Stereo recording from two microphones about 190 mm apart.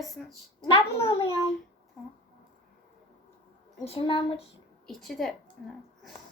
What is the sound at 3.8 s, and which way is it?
Speech, 30° left (ahead or behind).